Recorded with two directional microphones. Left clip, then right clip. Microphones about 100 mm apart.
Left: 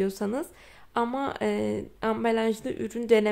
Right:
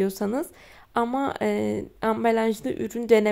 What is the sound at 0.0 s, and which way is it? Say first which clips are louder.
Speech: right 3 dB; 35° right (ahead or behind).